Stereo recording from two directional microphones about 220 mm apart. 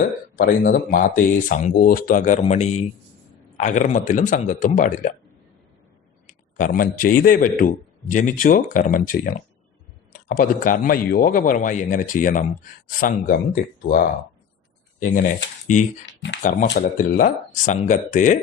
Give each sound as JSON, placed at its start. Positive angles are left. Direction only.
{"t": 0.3, "sound": "a man's voice", "side_deg": 40}
{"t": 6.2, "sound": "a man's voice", "side_deg": 40}
{"t": 16.0, "sound": "speech", "side_deg": 55}
{"t": 16.4, "sound": "a man's voice", "side_deg": 35}